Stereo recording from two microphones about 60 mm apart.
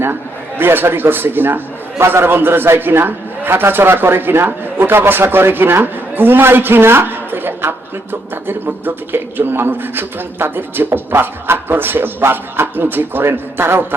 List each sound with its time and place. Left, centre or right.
0.6 s a man's voice: right